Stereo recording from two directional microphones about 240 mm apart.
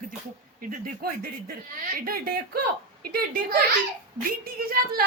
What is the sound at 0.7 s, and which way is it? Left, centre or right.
A woman's voice, right.